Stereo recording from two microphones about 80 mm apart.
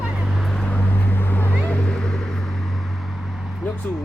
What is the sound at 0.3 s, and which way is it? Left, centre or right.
Vehicle, centre.